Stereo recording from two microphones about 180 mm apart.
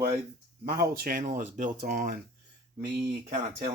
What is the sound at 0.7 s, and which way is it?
Speech, 55° right (ahead or behind).